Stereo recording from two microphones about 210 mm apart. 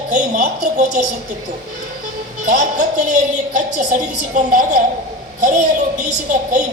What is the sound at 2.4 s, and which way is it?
A woman's voice, 35° right (ahead or behind).